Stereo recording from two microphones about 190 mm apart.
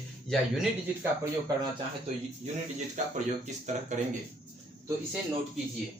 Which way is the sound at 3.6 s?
40° right (ahead or behind).